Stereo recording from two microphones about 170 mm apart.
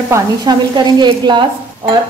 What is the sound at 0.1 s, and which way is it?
Speech, 25° right (ahead or behind).